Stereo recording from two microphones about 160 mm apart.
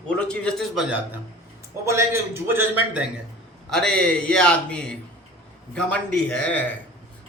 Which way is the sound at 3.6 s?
5° left (ahead or behind).